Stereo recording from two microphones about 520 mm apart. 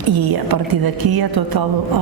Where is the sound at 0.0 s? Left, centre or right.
Right.